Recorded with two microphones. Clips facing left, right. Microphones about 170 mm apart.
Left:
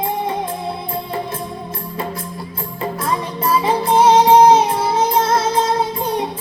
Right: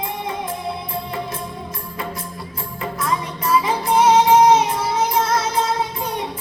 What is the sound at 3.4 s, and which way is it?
Music, 30° left (ahead or behind).